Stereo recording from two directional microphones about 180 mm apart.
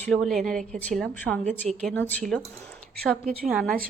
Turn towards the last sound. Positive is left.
turn(degrees=0)  # may be behind; listen again after turning